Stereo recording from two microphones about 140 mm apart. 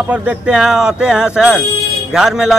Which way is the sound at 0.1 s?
10° right (ahead or behind).